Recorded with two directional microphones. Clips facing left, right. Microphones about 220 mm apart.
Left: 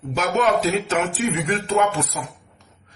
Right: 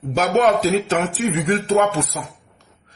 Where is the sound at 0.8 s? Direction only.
40° right (ahead or behind).